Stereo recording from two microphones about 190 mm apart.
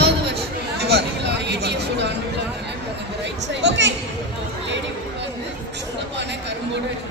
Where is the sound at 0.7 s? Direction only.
60° right (ahead or behind).